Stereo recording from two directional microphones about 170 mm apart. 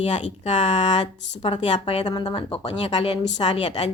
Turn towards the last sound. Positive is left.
turn(degrees=35)  # may be behind; listen again after turning